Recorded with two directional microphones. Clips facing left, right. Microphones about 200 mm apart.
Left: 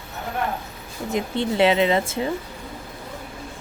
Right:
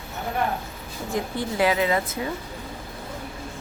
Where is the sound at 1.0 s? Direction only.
20° left (ahead or behind).